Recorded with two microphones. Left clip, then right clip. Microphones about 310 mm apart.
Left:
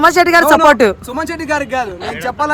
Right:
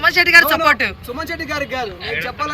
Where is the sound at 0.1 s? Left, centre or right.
Centre.